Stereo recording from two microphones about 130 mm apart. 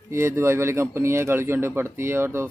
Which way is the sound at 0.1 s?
20° right (ahead or behind).